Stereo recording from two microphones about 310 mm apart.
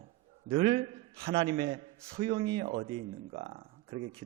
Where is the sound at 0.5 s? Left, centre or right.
Centre.